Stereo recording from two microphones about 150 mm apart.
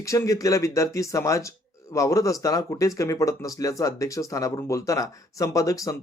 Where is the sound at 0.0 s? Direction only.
20° left (ahead or behind).